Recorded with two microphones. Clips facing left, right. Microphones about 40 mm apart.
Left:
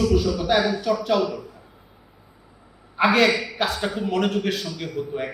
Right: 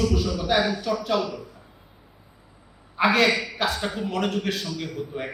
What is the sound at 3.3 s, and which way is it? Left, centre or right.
Speech, left.